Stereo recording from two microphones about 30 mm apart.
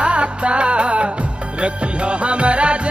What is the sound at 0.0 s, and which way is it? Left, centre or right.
Music, right.